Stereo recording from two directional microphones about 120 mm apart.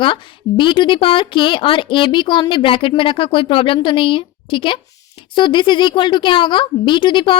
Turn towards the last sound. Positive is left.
turn(degrees=40)  # may be behind; listen again after turning